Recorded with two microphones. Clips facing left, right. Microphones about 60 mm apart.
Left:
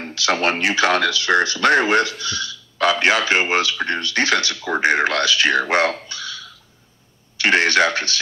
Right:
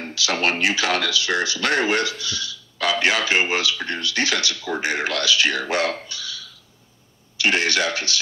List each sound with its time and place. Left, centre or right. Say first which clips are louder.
0.1 s speech: left 3 dB; left
6.0 s a sound: left 3 dB; left
7.3 s speech: left 5 dB; left